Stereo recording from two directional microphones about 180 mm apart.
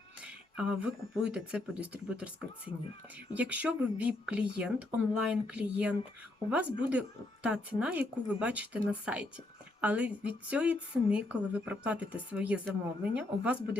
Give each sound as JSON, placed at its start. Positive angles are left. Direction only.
{"t": 0.5, "sound": "speech", "side_deg": -5}
{"t": 3.3, "sound": "speech", "side_deg": -10}